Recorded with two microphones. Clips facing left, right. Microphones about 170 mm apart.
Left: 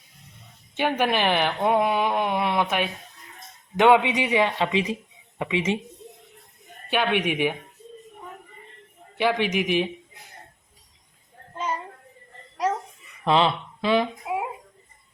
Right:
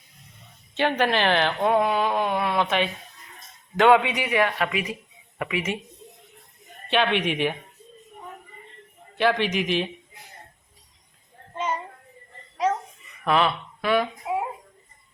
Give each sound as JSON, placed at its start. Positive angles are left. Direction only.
{"t": 0.7, "sound": "a woman's voice", "side_deg": 10}
{"t": 6.9, "sound": "a woman's voice", "side_deg": 10}
{"t": 9.1, "sound": "a woman's voice", "side_deg": 15}
{"t": 11.5, "sound": "child singing", "side_deg": 0}
{"t": 13.2, "sound": "speech", "side_deg": 25}